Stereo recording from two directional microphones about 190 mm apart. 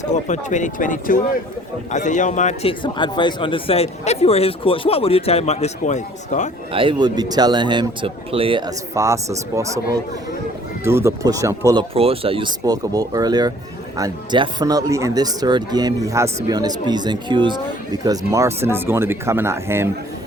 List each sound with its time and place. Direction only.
0.0 s speech: 40° left (ahead or behind)
6.7 s speech: 25° right (ahead or behind)
9.0 s speech: 15° right (ahead or behind)